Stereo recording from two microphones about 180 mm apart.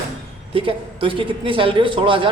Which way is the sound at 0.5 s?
30° right (ahead or behind).